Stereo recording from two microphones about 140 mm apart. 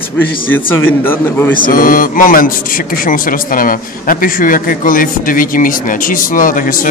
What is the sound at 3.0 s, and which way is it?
A man's voice, 85° left.